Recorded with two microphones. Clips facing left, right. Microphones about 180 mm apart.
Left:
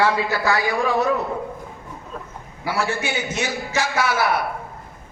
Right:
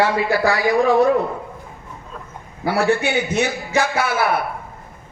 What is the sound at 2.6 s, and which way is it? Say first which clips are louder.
A man's voice: right 6 dB; 60° right (ahead or behind).